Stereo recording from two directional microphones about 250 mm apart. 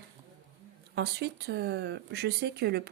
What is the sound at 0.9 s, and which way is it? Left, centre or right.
Speech, right.